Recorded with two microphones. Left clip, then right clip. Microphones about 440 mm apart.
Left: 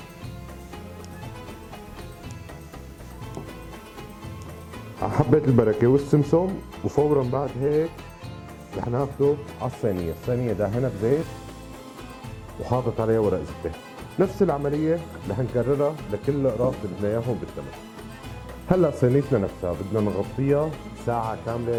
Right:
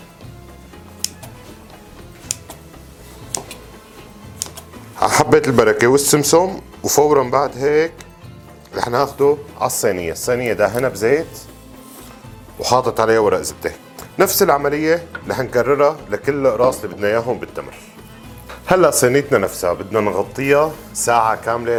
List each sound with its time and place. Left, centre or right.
4.9 s speech: centre
12.6 s speech: centre
18.7 s speech: centre